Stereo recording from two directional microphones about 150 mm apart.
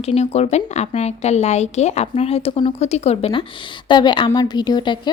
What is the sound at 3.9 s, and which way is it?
A woman's voice, 30° left (ahead or behind).